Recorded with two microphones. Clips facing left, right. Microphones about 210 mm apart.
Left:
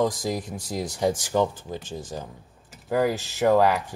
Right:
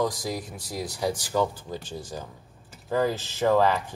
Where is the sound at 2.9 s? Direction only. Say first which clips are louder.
Left 2 dB; 15° left (ahead or behind).